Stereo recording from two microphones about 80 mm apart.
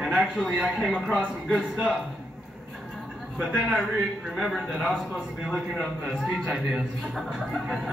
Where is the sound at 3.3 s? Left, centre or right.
Centre.